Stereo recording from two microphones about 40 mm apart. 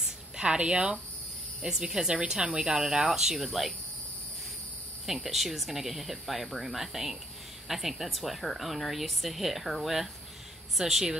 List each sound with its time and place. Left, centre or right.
0.0 s a sound: centre
1.6 s speech: centre
5.0 s speech: centre